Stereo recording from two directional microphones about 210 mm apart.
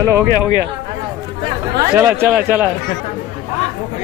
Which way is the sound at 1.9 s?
5° right (ahead or behind).